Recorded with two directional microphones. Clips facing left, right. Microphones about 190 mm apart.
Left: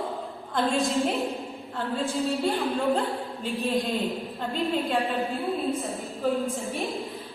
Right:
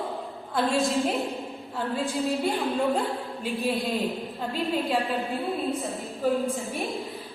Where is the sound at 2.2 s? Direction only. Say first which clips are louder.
Even; 15° right (ahead or behind).